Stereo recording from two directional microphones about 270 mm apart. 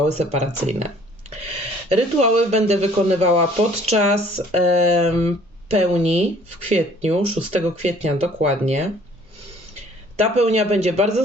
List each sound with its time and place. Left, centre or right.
0.1 s speech: right
10.2 s speech: right